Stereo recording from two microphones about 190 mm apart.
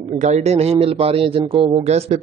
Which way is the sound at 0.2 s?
35° right (ahead or behind).